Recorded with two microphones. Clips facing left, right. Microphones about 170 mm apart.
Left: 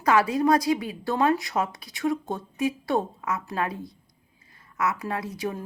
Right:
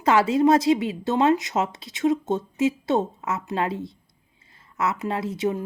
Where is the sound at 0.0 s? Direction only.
25° right (ahead or behind).